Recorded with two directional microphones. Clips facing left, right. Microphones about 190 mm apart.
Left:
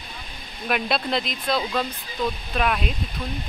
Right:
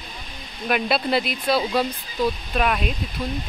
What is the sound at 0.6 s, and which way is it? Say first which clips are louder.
Speech: right 2 dB; centre (ahead or behind).